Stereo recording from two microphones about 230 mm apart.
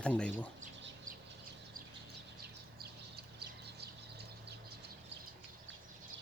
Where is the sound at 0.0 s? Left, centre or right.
Centre.